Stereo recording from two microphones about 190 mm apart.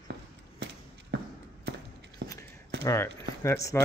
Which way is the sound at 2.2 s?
50° right (ahead or behind).